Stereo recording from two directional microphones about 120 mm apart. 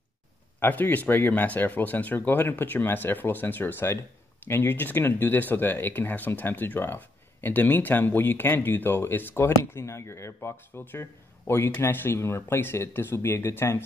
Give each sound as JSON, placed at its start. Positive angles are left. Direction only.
{"t": 0.6, "sound": "speech", "side_deg": 15}